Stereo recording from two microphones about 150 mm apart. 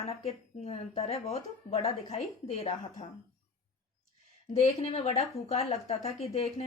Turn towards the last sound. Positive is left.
turn(degrees=45)  # may be behind; listen again after turning